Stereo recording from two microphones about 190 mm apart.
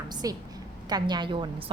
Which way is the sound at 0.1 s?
20° right (ahead or behind).